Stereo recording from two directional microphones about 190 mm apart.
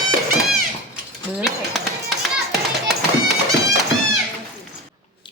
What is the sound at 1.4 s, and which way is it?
Run, centre (ahead or behind).